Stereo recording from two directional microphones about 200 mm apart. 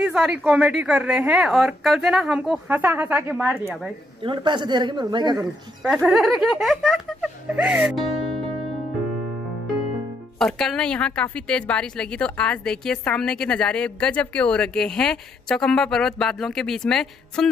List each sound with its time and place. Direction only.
0.0 s a woman's voice: 5° right (ahead or behind)
4.2 s speech: 25° right (ahead or behind)
5.9 s a woman's voice: centre (ahead or behind)
10.4 s a woman's voice: centre (ahead or behind)